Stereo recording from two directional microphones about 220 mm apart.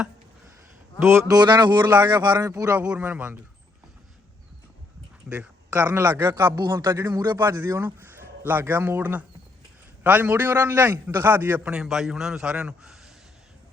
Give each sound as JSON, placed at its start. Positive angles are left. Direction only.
{"t": 1.3, "sound": "a man's voice", "side_deg": -20}
{"t": 5.3, "sound": "a man's voice", "side_deg": -5}